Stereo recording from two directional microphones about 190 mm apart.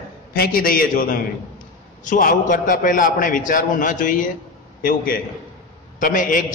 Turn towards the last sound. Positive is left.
turn(degrees=45)  # may be behind; listen again after turning